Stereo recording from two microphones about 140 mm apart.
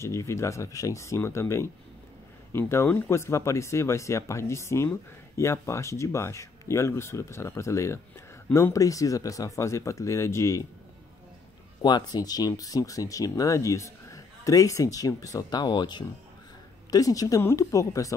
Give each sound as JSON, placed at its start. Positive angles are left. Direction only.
{"t": 0.0, "sound": "speech", "side_deg": 20}
{"t": 2.7, "sound": "speech", "side_deg": 20}
{"t": 11.8, "sound": "speech", "side_deg": 30}